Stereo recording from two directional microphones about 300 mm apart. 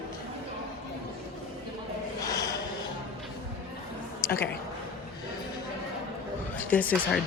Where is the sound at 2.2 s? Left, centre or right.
Centre.